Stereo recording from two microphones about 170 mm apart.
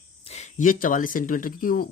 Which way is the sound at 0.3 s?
40° left (ahead or behind).